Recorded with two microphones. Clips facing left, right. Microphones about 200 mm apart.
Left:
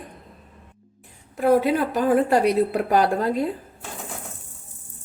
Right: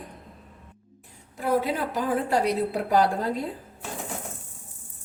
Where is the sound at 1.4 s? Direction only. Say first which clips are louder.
Left 6 dB; 60° left (ahead or behind).